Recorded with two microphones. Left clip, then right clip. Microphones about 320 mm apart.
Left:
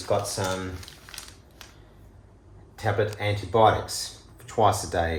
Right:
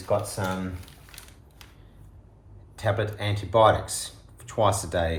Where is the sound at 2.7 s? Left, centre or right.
Centre.